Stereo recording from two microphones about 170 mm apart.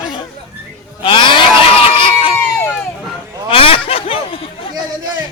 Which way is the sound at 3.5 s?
30° left (ahead or behind).